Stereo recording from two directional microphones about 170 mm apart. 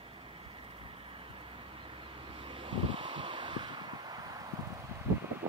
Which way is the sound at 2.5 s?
30° right (ahead or behind).